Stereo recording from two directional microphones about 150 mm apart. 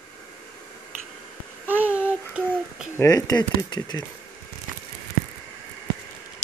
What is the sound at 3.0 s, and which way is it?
Speech, 25° left (ahead or behind).